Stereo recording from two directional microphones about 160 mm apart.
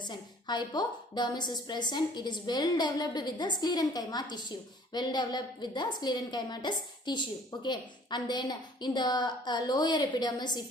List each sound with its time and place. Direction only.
0.0 s a woman's voice: 30° left (ahead or behind)